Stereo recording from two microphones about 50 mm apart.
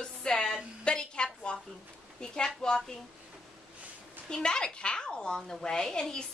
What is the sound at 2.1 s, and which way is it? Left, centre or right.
Speech, centre.